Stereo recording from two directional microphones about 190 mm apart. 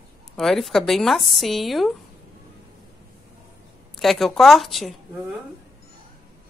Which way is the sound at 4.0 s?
Centre (ahead or behind).